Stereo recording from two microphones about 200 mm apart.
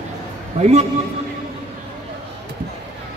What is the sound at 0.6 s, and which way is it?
Speech, 35° right (ahead or behind).